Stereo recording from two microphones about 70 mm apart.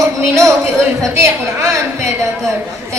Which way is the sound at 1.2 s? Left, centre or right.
Right.